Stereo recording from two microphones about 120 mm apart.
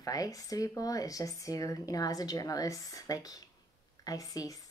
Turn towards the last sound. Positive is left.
turn(degrees=30)  # may be behind; listen again after turning